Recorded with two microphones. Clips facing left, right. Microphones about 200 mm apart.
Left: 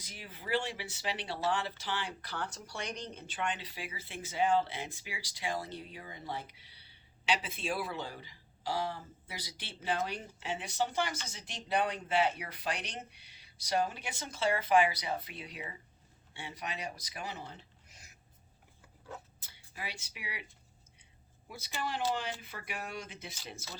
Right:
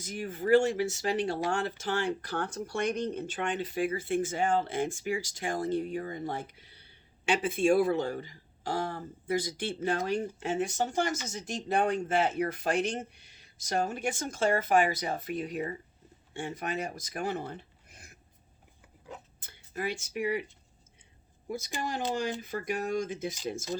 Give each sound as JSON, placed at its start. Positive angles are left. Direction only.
{"t": 0.0, "sound": "speech", "side_deg": -50}
{"t": 19.7, "sound": "speech", "side_deg": -50}
{"t": 21.5, "sound": "speech", "side_deg": -45}